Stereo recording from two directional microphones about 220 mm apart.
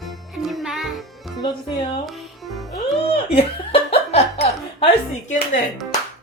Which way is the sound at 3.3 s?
25° left (ahead or behind).